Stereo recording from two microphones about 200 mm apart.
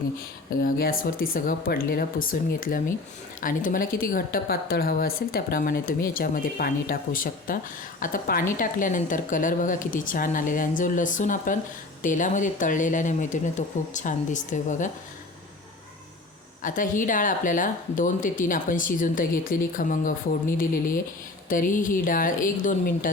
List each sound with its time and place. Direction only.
0.6 s a woman's voice: 45° left (ahead or behind)
16.6 s a woman's voice: 40° left (ahead or behind)